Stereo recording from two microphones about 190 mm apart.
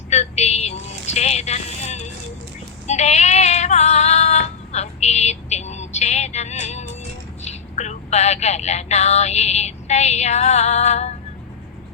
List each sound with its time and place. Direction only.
0.1 s vehicle: 35° left (ahead or behind)
2.8 s female singing: 35° left (ahead or behind)
7.4 s speech: 35° left (ahead or behind)